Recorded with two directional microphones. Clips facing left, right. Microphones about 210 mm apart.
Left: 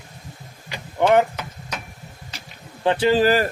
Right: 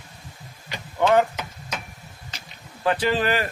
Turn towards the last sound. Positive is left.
turn(degrees=35)  # may be behind; listen again after turning